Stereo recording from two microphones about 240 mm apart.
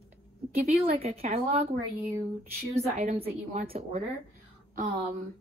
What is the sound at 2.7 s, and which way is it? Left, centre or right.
A woman's voice, right.